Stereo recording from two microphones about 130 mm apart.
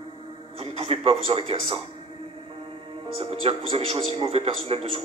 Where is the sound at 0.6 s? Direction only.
45° right (ahead or behind).